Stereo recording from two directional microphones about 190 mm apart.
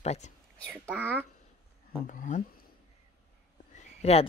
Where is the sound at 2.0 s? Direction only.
45° left (ahead or behind).